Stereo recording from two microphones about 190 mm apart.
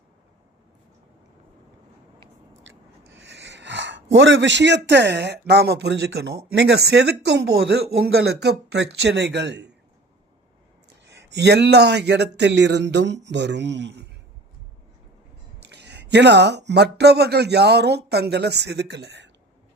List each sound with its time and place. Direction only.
2.6 s speech: 70° right (ahead or behind)
10.8 s speech: 65° right (ahead or behind)
15.6 s speech: 65° right (ahead or behind)